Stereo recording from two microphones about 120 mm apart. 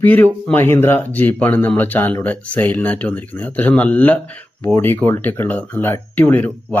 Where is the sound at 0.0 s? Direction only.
15° left (ahead or behind).